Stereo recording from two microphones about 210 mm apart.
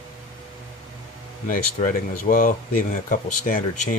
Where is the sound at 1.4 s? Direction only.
40° left (ahead or behind).